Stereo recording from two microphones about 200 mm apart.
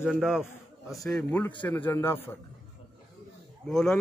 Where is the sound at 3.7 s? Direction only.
Centre (ahead or behind).